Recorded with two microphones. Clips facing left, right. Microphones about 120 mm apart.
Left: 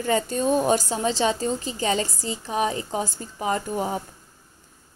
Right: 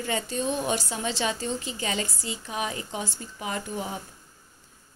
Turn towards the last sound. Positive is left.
turn(degrees=40)  # may be behind; listen again after turning